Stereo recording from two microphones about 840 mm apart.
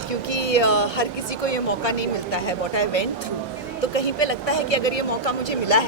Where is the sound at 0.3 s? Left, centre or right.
Left.